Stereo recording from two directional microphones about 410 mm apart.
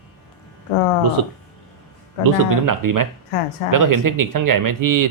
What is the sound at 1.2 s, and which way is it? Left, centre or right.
Speech, right.